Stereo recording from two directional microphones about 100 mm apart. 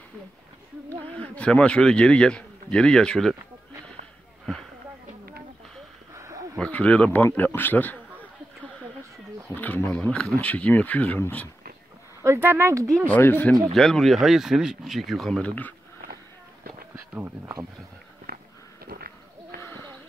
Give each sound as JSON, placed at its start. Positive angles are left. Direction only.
{"t": 1.3, "sound": "speech", "side_deg": 10}
{"t": 6.1, "sound": "a sound", "side_deg": -30}
{"t": 6.6, "sound": "speech", "side_deg": 15}
{"t": 9.6, "sound": "speech", "side_deg": 15}
{"t": 12.2, "sound": "speech", "side_deg": -25}
{"t": 13.0, "sound": "speech", "side_deg": 20}
{"t": 13.7, "sound": "speech", "side_deg": 0}
{"t": 15.4, "sound": "speech", "side_deg": 15}
{"t": 17.2, "sound": "speech", "side_deg": -30}
{"t": 19.6, "sound": "a sound", "side_deg": 25}